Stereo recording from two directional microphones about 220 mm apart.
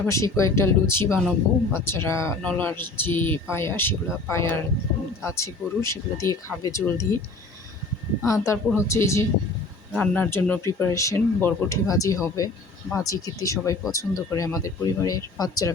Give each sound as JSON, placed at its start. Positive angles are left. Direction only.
{"t": 0.0, "sound": "speech", "side_deg": 15}
{"t": 8.2, "sound": "speech", "side_deg": 15}